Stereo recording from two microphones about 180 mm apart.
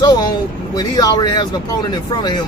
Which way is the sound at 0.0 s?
25° left (ahead or behind).